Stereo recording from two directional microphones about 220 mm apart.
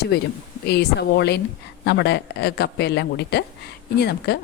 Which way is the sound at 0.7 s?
50° left (ahead or behind).